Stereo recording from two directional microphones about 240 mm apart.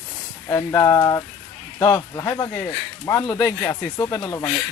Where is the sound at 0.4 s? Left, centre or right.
Centre.